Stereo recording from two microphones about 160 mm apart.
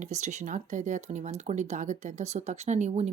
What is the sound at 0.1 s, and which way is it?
Speech, 45° right (ahead or behind).